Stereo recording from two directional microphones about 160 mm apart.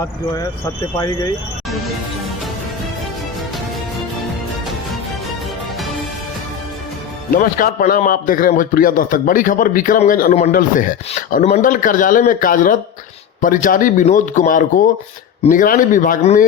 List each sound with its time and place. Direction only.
0.9 s speech: 20° left (ahead or behind)
7.3 s a man's voice: 60° left (ahead or behind)